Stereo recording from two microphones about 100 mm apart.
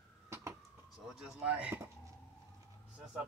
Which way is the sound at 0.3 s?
25° right (ahead or behind).